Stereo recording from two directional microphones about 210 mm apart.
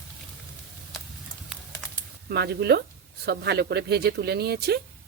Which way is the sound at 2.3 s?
50° right (ahead or behind).